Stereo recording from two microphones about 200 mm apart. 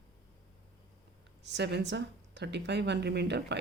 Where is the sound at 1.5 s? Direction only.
60° right (ahead or behind).